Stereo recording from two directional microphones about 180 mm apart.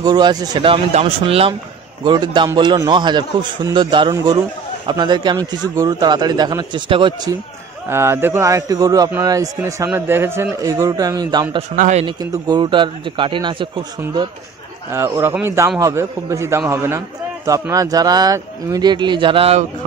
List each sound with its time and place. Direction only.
0.0 s a man's voice: 25° right (ahead or behind)
7.9 s a man's voice: 15° right (ahead or behind)
11.7 s a man's voice: 45° right (ahead or behind)
12.0 s a man's voice: 25° right (ahead or behind)
14.9 s a man's voice: 15° right (ahead or behind); by 19.6 s 30° right (ahead or behind)